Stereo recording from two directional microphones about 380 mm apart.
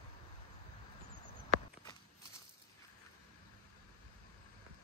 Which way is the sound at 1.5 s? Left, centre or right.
Centre.